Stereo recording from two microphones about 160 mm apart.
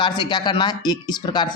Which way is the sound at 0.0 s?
25° left (ahead or behind).